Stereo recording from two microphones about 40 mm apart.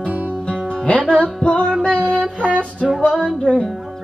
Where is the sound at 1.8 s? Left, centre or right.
Left.